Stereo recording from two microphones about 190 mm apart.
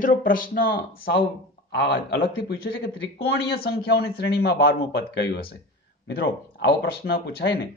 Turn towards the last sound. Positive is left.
turn(degrees=55)  # may be behind; listen again after turning